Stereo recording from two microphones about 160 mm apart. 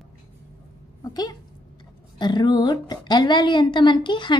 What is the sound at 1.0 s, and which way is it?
A woman's voice, 25° left (ahead or behind).